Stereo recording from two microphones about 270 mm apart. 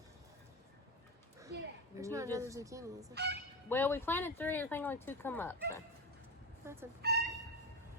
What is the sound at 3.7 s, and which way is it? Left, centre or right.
A woman's voice, centre.